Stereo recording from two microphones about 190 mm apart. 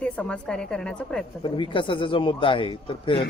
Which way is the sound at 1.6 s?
25° left (ahead or behind).